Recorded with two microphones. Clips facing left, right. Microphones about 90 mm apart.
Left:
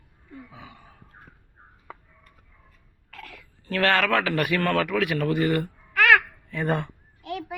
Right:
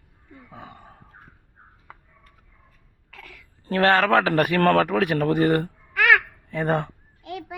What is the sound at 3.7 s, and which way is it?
A man's voice, 35° right (ahead or behind).